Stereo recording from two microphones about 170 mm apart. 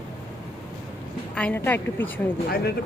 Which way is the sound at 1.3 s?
10° left (ahead or behind).